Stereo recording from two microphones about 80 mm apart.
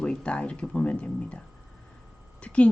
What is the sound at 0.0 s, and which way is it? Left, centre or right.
Speech, centre.